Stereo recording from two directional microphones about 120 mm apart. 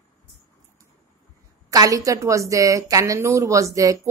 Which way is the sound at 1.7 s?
30° right (ahead or behind).